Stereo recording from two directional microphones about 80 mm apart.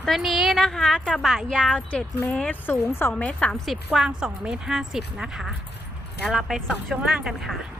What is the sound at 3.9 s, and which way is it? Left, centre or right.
A woman's voice, centre.